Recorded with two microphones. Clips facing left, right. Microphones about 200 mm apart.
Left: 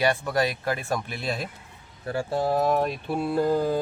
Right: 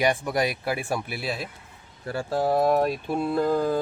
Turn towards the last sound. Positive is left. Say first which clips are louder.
# even
turn(degrees=10)  # may be behind; listen again after turning